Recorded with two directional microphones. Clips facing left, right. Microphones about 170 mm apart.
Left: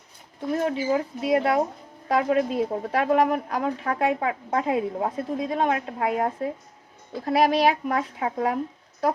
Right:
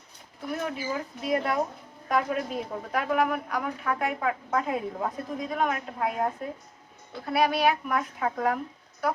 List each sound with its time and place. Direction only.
0.6 s a woman's voice: 30° left (ahead or behind)
7.3 s speech: 35° left (ahead or behind)
8.2 s a woman's voice: 25° left (ahead or behind)